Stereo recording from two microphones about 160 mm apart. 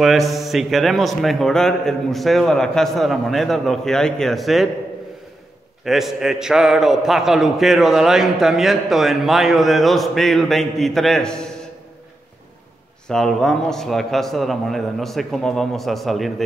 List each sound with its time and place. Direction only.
0.0 s a man's voice: centre (ahead or behind)
5.9 s a man's voice: centre (ahead or behind)
13.1 s a man's voice: centre (ahead or behind)